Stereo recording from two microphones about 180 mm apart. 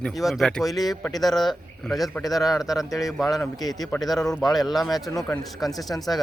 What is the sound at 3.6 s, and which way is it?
Speech, 20° left (ahead or behind).